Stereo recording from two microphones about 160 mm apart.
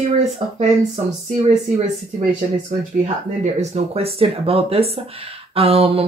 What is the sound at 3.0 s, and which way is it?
Speech, 45° right (ahead or behind).